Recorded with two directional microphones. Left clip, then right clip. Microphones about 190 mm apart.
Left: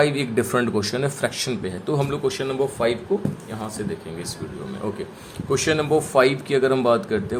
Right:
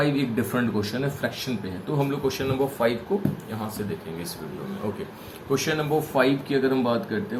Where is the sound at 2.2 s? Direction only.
25° left (ahead or behind).